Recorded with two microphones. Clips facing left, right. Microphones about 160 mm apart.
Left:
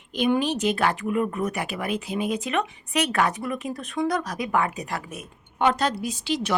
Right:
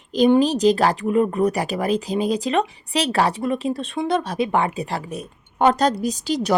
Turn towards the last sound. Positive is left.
turn(degrees=-40)  # may be behind; listen again after turning